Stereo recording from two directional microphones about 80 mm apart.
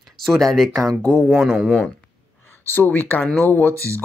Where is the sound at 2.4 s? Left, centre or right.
Left.